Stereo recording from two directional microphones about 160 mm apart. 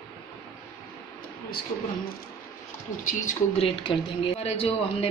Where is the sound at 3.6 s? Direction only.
35° left (ahead or behind).